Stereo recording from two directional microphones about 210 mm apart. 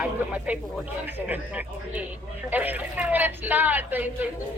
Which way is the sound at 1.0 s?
10° right (ahead or behind).